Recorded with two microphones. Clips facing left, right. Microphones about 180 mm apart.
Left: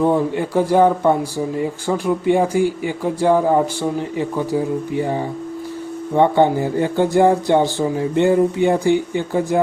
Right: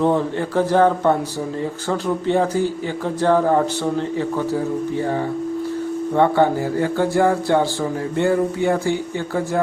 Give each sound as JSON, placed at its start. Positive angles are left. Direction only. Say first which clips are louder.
{"t": 0.0, "sound": "speech", "louder": "left 2 dB", "side_deg": 10}